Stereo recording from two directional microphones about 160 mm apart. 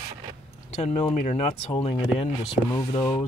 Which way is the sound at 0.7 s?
40° left (ahead or behind).